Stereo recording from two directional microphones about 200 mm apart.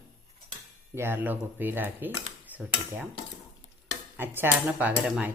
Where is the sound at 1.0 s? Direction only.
10° right (ahead or behind).